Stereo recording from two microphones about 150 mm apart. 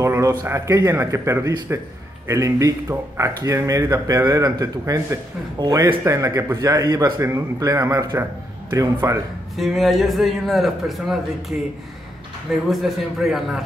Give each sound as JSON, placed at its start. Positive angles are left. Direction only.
{"t": 0.0, "sound": "speech", "side_deg": -20}
{"t": 9.6, "sound": "a man's voice", "side_deg": 0}
{"t": 12.6, "sound": "a man's voice", "side_deg": 0}